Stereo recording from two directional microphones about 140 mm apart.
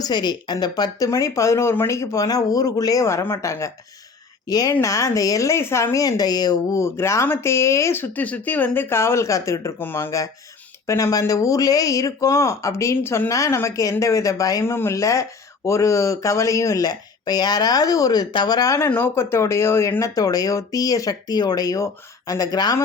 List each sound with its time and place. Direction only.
0.0 s speech: 30° left (ahead or behind)